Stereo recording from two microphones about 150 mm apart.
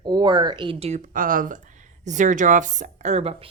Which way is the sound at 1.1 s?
70° right (ahead or behind).